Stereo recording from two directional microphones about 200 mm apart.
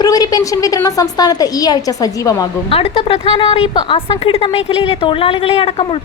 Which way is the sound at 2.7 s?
30° left (ahead or behind).